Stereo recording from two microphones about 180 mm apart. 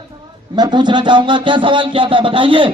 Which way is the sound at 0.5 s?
25° right (ahead or behind).